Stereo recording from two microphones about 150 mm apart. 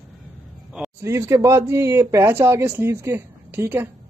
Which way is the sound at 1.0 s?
20° right (ahead or behind).